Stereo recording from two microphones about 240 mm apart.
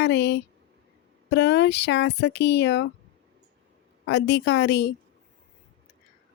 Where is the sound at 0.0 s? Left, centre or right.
Left.